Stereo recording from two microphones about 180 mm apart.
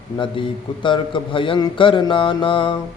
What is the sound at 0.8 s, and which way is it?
A man's voice, 30° left (ahead or behind).